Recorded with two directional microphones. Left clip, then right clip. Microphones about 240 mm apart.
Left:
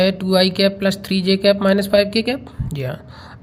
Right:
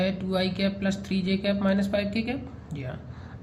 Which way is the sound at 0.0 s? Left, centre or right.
Left.